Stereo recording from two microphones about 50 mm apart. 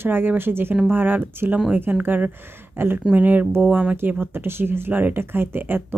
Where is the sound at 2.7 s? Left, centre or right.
Right.